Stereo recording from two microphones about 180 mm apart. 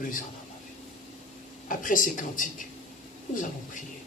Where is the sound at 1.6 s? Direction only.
50° left (ahead or behind).